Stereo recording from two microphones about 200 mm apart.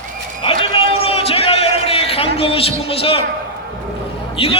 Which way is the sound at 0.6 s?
30° left (ahead or behind).